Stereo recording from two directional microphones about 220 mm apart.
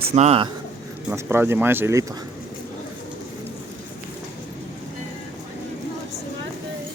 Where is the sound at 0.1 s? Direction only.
30° right (ahead or behind).